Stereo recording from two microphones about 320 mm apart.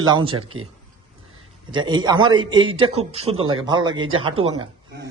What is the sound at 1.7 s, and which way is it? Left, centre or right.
A man's voice, centre.